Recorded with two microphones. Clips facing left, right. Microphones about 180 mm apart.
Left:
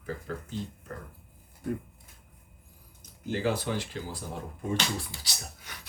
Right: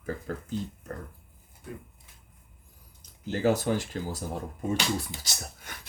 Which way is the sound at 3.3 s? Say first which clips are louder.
Right 4 dB; 45° right (ahead or behind).